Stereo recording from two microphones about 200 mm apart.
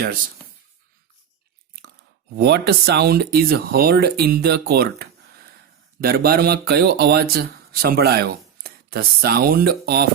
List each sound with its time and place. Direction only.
2.3 s speech: 55° right (ahead or behind)